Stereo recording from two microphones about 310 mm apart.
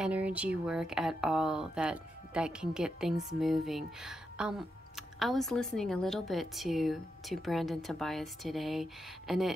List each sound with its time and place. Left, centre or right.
0.0 s speech: centre